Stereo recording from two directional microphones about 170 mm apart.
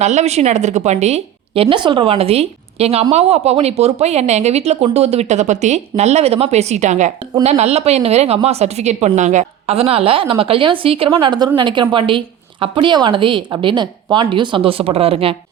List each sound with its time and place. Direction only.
0.0 s a woman's voice: 40° right (ahead or behind)